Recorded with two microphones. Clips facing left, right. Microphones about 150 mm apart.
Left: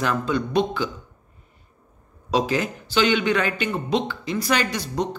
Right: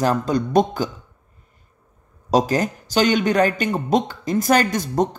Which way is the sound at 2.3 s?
40° right (ahead or behind).